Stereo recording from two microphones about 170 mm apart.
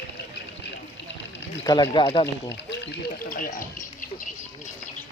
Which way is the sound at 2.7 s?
90° left.